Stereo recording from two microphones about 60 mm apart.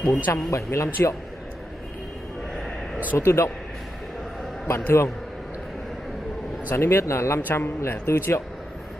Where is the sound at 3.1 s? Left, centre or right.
Left.